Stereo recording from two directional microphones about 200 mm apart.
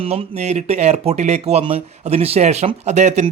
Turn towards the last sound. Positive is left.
turn(degrees=-35)  # may be behind; listen again after turning